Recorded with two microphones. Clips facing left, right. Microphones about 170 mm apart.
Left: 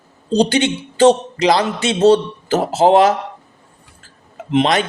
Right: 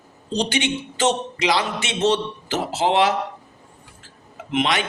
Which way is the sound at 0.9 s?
35° left (ahead or behind).